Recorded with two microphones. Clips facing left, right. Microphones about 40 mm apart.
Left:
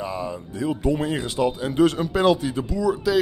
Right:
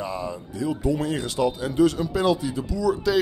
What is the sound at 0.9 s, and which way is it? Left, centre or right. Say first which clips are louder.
Speech: left 1 dB; left.